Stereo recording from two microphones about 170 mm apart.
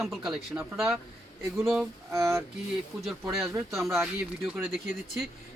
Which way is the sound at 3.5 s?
15° right (ahead or behind).